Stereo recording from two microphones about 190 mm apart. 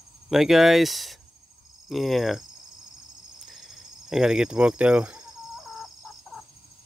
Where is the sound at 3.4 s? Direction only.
Centre (ahead or behind).